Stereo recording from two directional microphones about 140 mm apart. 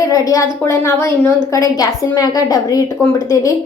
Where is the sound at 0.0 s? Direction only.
25° left (ahead or behind).